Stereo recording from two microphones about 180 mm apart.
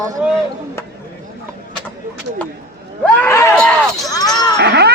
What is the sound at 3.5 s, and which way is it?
Speech, centre (ahead or behind).